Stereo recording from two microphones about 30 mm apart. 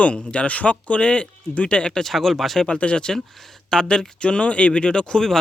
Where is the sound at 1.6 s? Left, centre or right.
Left.